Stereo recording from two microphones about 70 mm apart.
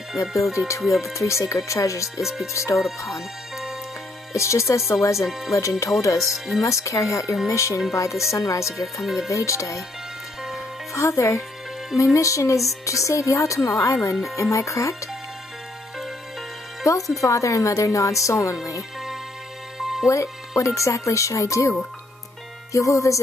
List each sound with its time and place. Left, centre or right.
0.5 s speech: left
2.1 s speech: centre
2.5 s speech: left
3.1 s music: centre
4.3 s speech: left
6.3 s speech: centre
6.6 s speech: left
9.0 s speech: centre
9.3 s speech: left
10.9 s speech: left
16.8 s speech: left
19.8 s music: centre
20.1 s speech: left